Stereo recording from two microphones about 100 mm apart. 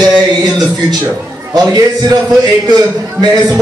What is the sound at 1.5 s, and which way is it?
A man's voice, 40° right (ahead or behind).